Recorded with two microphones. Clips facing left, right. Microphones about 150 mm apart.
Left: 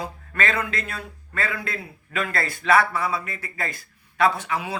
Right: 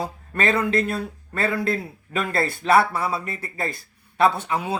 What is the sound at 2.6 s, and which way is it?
A man's voice, 30° right (ahead or behind).